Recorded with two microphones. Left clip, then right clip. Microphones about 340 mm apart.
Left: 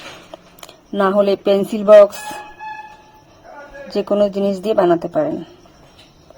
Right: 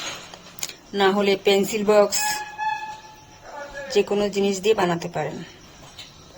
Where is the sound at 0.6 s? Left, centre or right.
Left.